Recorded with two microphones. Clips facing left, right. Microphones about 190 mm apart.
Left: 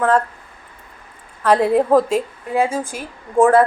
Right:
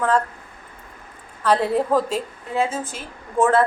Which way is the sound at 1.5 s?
10° left (ahead or behind).